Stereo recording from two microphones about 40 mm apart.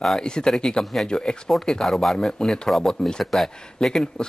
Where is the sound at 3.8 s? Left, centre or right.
Centre.